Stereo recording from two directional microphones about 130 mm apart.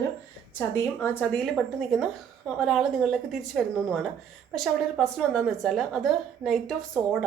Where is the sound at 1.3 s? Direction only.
5° left (ahead or behind).